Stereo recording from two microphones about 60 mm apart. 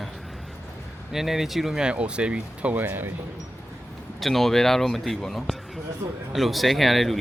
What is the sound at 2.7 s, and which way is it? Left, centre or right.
Speech, right.